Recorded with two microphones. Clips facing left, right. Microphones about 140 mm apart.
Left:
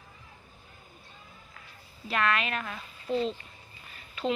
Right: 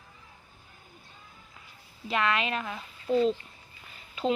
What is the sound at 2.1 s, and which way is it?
A woman's voice, 20° right (ahead or behind).